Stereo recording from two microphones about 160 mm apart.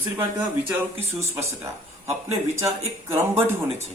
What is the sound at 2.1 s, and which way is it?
Speech, 15° right (ahead or behind).